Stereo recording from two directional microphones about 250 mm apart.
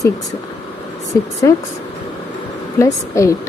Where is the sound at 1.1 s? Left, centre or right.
Centre.